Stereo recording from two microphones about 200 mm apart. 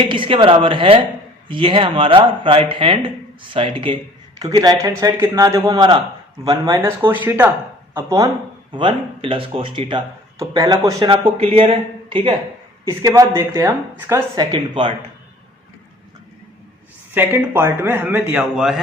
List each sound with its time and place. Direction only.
0.1 s speech: 25° right (ahead or behind)
17.2 s speech: 10° right (ahead or behind)